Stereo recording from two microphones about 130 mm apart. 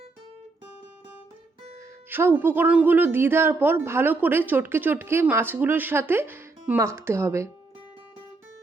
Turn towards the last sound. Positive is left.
turn(degrees=-25)  # may be behind; listen again after turning